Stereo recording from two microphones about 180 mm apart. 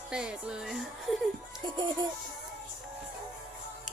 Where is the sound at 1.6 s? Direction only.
25° right (ahead or behind).